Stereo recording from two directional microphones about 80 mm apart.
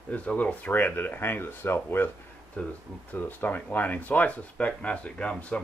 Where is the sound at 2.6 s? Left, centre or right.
Centre.